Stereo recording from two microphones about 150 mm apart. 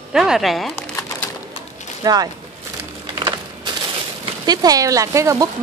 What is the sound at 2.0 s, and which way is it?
Speech, 25° right (ahead or behind).